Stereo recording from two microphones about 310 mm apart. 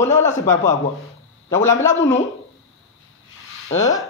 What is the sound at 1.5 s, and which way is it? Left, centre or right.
Speech, centre.